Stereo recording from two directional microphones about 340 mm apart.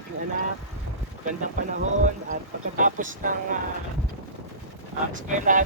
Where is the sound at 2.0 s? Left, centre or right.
Right.